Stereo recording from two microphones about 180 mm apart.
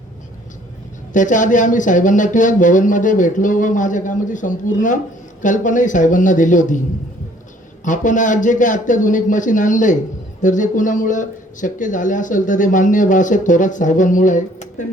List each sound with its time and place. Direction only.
1.1 s speech: 45° left (ahead or behind)
7.9 s speech: 45° left (ahead or behind)